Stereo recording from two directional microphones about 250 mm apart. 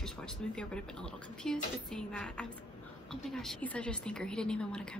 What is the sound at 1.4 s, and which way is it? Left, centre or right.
A woman's voice, centre.